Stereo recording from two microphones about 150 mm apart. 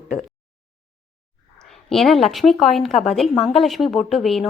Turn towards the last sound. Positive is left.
turn(degrees=0)  # may be behind; listen again after turning